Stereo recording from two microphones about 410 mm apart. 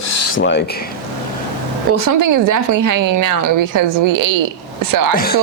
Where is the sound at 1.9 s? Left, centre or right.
Right.